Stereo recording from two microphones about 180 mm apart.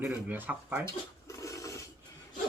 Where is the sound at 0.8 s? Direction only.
15° left (ahead or behind).